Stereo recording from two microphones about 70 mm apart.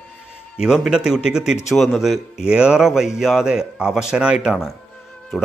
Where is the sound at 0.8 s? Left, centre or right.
Centre.